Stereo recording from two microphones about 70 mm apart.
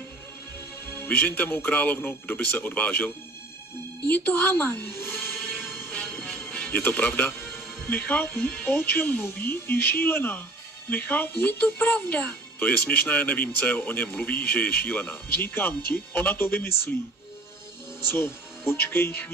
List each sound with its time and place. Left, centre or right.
0.9 s speech: left
4.1 s music: left
5.9 s music: centre
6.7 s speech: left
18.1 s speech: left